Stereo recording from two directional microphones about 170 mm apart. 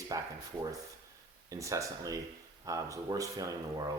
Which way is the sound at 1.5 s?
20° right (ahead or behind).